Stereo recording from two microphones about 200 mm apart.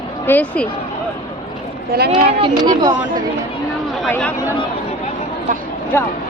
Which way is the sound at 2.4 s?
20° right (ahead or behind).